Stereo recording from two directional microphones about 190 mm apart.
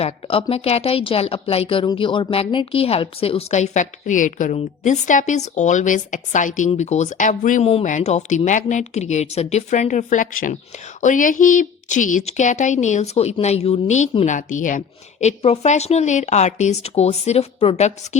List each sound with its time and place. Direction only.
0.0 s a woman's voice: 30° left (ahead or behind)